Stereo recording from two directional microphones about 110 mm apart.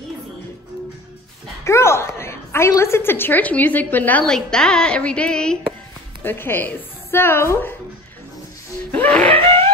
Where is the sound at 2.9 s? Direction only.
20° left (ahead or behind).